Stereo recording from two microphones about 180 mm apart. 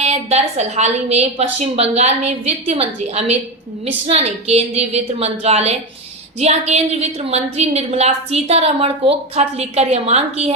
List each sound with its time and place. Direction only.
0.0 s a woman's voice: 35° right (ahead or behind)